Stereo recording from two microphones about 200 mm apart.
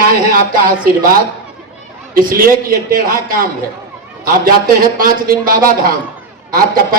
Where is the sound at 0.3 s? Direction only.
45° right (ahead or behind).